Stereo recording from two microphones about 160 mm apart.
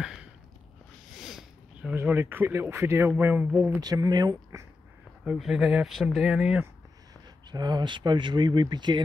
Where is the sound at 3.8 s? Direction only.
25° right (ahead or behind).